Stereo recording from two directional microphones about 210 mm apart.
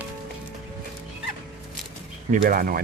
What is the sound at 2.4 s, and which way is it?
Speech, 45° right (ahead or behind).